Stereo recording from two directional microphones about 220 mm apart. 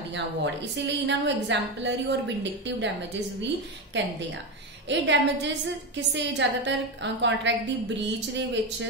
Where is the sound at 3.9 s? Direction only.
55° right (ahead or behind).